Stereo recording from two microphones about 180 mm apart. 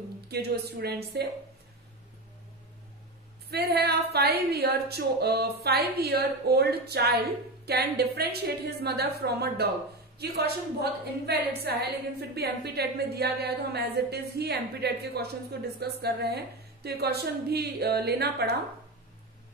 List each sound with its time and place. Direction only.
0.3 s a woman's voice: 65° right (ahead or behind)
3.4 s a woman's voice: 60° right (ahead or behind)